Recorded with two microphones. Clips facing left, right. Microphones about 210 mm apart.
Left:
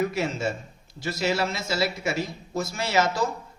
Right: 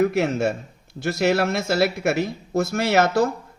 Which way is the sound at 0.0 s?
60° right (ahead or behind).